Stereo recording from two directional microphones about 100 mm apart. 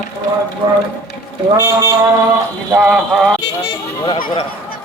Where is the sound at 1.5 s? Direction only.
30° right (ahead or behind).